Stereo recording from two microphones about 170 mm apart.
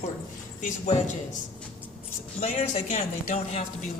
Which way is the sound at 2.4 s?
40° left (ahead or behind).